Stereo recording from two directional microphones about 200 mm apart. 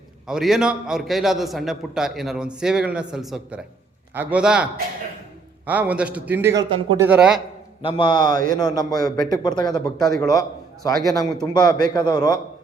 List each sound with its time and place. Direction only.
0.3 s a man's voice: centre (ahead or behind)
7.8 s a man's voice: 25° left (ahead or behind)